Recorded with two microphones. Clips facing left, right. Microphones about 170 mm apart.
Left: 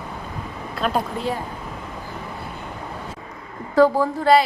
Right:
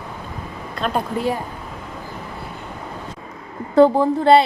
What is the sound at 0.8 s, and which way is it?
Speech, 5° left (ahead or behind).